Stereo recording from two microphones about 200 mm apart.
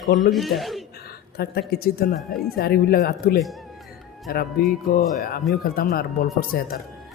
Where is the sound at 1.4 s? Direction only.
50° left (ahead or behind).